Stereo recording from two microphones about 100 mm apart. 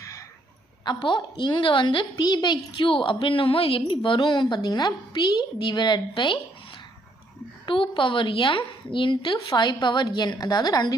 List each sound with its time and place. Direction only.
0.0 s a sound: 35° left (ahead or behind)
0.9 s a woman's voice: 50° left (ahead or behind)
7.6 s a woman's voice: 60° left (ahead or behind); by 10.9 s 45° left (ahead or behind)